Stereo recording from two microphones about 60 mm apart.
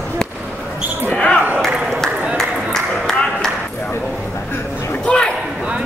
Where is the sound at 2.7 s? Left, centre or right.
Centre.